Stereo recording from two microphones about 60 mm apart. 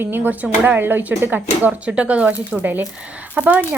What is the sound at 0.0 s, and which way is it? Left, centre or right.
A woman's voice, right.